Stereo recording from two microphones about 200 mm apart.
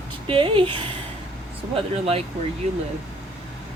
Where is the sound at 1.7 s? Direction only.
30° right (ahead or behind).